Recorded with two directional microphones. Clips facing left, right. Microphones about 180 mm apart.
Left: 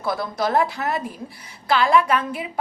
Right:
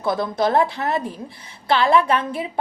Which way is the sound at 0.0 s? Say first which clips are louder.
Right 3 dB; 25° right (ahead or behind).